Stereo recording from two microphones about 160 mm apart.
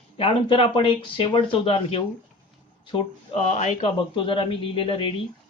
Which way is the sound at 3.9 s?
30° left (ahead or behind).